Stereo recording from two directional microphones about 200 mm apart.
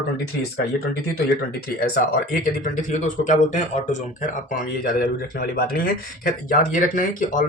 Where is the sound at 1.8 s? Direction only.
45° left (ahead or behind).